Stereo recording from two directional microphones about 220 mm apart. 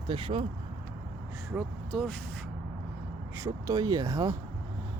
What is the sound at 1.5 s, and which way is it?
Speech, centre (ahead or behind).